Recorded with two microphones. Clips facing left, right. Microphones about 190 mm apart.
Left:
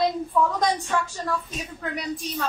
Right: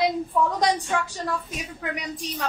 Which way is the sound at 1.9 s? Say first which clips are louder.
Left 3 dB; 15° right (ahead or behind).